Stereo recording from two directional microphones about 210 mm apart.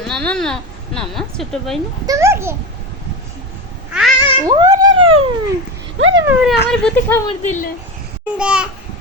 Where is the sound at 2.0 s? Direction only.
15° right (ahead or behind).